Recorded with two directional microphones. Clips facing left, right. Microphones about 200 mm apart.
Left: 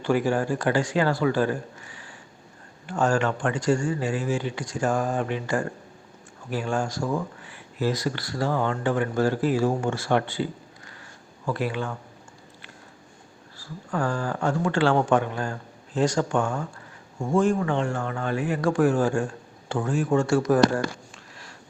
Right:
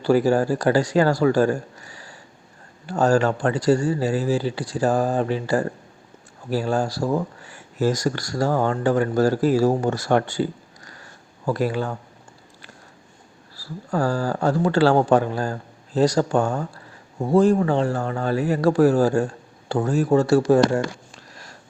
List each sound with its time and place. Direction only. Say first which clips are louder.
0.0 s speech: right 5 dB; 40° right (ahead or behind)
13.6 s speech: right 4 dB; 35° right (ahead or behind)